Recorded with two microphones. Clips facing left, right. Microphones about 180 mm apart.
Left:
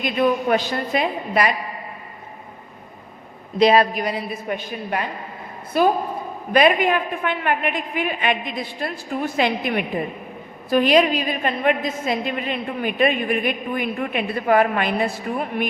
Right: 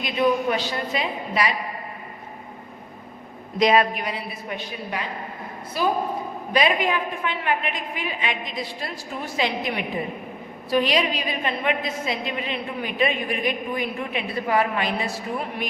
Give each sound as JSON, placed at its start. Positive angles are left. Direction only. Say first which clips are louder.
{"t": 0.5, "sound": "a woman's voice", "louder": "left 5 dB", "side_deg": 50}
{"t": 3.6, "sound": "a woman's voice", "louder": "left 3 dB", "side_deg": 35}